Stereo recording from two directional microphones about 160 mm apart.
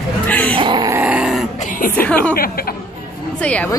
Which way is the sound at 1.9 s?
10° left (ahead or behind).